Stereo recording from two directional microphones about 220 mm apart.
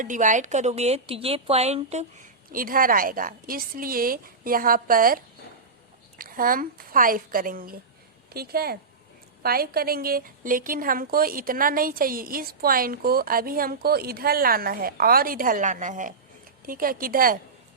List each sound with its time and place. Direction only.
0.0 s a woman's voice: 35° right (ahead or behind)